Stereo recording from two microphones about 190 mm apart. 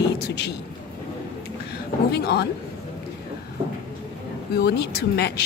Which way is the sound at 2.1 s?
60° left (ahead or behind).